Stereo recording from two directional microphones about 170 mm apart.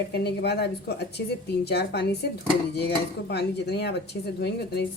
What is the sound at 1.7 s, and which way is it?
Speech, 75° left (ahead or behind).